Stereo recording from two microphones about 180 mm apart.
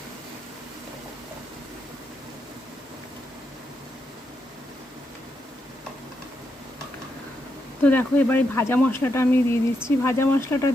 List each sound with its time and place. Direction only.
7.8 s speech: 10° left (ahead or behind)